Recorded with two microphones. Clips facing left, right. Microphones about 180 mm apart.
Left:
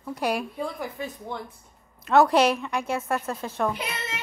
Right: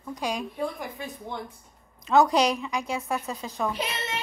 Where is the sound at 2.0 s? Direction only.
Centre (ahead or behind).